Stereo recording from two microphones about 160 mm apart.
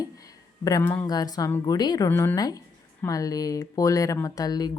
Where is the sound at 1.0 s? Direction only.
25° left (ahead or behind).